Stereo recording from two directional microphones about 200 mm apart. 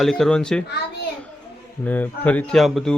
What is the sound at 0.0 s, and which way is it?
Speech, centre (ahead or behind).